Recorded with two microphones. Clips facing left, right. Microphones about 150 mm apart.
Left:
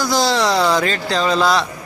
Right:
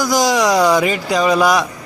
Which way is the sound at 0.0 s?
15° right (ahead or behind).